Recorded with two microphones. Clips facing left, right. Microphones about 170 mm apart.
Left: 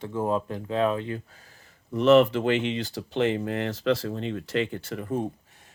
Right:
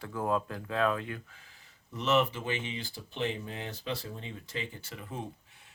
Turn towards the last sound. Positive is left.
turn(degrees=55)  # may be behind; listen again after turning